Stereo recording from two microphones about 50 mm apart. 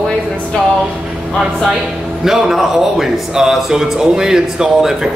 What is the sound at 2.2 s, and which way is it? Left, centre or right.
A man's voice, centre.